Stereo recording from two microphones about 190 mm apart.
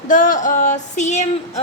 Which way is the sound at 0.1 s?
40° left (ahead or behind).